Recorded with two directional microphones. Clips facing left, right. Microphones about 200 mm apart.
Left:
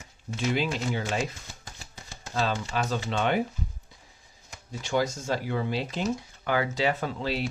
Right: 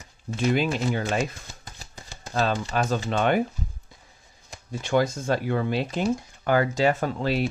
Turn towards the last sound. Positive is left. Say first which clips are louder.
# right 5 dB
turn(degrees=-50)  # may be behind; listen again after turning